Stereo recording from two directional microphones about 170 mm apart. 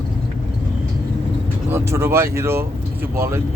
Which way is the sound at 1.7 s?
15° right (ahead or behind).